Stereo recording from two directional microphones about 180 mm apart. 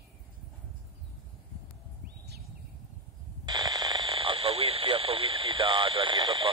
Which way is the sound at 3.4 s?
20° right (ahead or behind).